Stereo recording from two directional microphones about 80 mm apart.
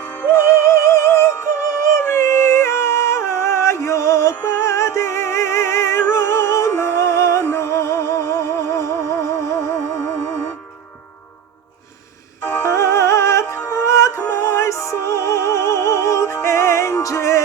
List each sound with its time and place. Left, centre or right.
0.0 s music: left
0.3 s music: left
12.4 s music: left